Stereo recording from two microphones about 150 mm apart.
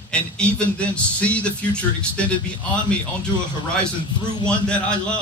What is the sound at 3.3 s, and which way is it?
Speech, 30° left (ahead or behind).